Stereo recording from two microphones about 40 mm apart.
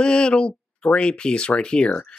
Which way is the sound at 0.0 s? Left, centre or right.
Left.